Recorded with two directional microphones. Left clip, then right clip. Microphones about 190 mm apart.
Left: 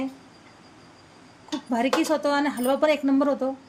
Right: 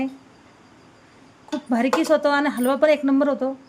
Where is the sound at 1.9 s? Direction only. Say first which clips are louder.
Right 6 dB; 25° right (ahead or behind).